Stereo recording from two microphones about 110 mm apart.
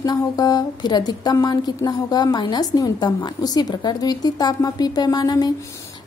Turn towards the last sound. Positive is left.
turn(degrees=40)  # may be behind; listen again after turning